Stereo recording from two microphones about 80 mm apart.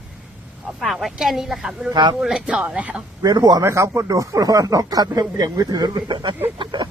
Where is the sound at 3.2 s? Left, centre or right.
Right.